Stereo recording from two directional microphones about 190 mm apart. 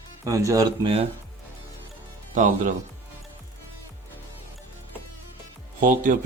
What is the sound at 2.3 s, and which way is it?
Speech, 40° right (ahead or behind).